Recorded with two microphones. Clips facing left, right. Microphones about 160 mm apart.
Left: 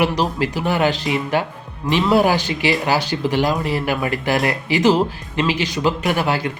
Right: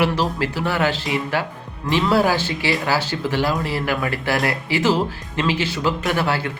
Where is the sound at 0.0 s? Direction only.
15° left (ahead or behind).